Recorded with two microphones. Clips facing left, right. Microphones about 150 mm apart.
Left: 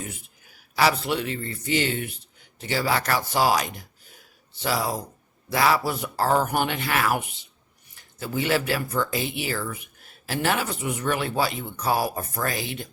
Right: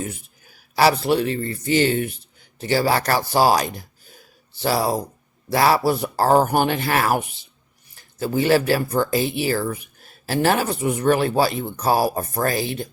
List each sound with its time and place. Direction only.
0.8 s speech: 35° right (ahead or behind)